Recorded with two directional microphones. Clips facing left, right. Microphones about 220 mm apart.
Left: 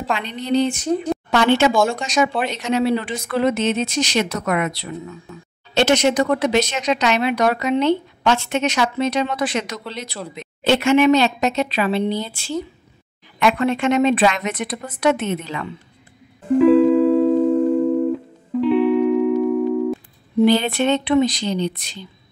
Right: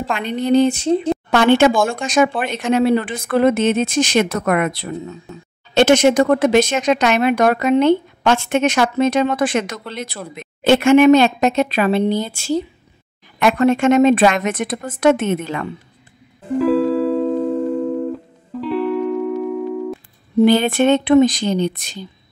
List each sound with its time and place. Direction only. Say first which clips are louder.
0.2 s speech: right 7 dB; 50° right (ahead or behind)
0.7 s speech: right 4 dB; 25° right (ahead or behind)
1.3 s speech: right 3 dB; 50° right (ahead or behind)
5.0 s speech: right 3 dB; 25° right (ahead or behind)
5.8 s speech: right 4 dB; 50° right (ahead or behind)
16.5 s music: left 4 dB; centre (ahead or behind)
20.4 s speech: right 3 dB; 50° right (ahead or behind)